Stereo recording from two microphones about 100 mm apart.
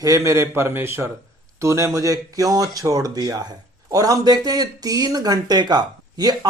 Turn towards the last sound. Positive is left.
turn(degrees=-40)  # may be behind; listen again after turning